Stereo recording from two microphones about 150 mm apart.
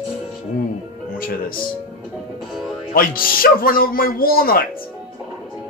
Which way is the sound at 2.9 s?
75° left (ahead or behind).